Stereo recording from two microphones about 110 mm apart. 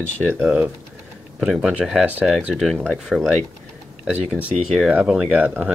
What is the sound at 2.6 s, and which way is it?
Speech, 5° right (ahead or behind).